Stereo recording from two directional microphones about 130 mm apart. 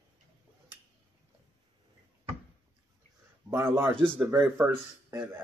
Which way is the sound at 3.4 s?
20° right (ahead or behind).